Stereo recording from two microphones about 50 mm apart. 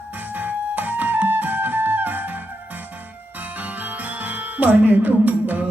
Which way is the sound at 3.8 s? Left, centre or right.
Right.